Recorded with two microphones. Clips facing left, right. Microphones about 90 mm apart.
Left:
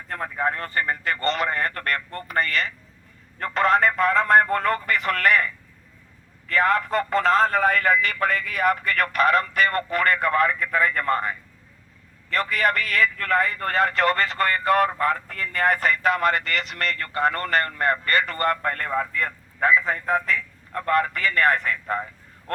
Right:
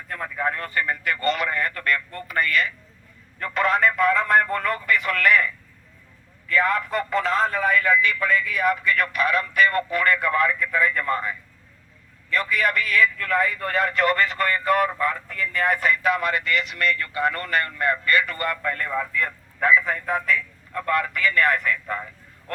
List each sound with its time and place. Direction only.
0.1 s a man's voice: 35° left (ahead or behind)
2.0 s a sound: 40° left (ahead or behind)
3.3 s a man's voice: 40° left (ahead or behind)
6.5 s a man's voice: 45° left (ahead or behind)